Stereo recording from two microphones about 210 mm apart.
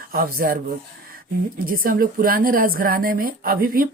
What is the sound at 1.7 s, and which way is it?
Speech, 40° right (ahead or behind).